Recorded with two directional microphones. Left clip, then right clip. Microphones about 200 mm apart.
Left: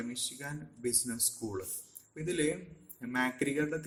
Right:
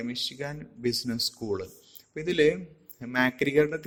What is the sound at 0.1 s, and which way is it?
Speech, 35° right (ahead or behind).